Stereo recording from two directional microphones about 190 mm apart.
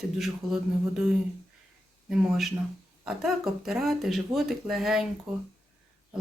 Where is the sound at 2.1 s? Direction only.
Centre (ahead or behind).